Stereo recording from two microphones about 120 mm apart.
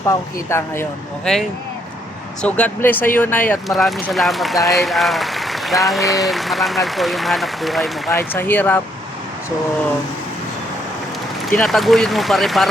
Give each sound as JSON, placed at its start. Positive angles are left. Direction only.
{"t": 0.0, "sound": "speech", "side_deg": 25}
{"t": 1.2, "sound": "speech", "side_deg": 5}
{"t": 3.7, "sound": "speech", "side_deg": 0}
{"t": 8.1, "sound": "speech", "side_deg": 15}
{"t": 11.5, "sound": "speech", "side_deg": 5}